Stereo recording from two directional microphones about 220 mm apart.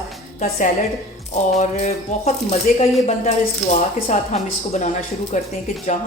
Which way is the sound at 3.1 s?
30° left (ahead or behind).